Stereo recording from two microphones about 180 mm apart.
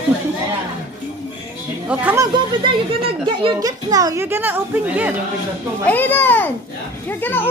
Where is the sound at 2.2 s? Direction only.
25° right (ahead or behind); by 5.1 s 10° right (ahead or behind).